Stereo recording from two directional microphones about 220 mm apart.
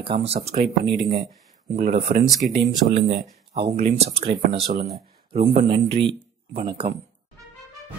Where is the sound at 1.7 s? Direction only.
30° right (ahead or behind).